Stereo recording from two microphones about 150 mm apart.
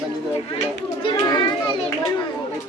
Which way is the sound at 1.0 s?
30° left (ahead or behind).